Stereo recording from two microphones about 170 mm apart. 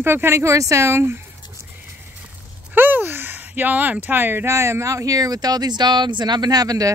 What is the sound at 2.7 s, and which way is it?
Speech, 10° right (ahead or behind).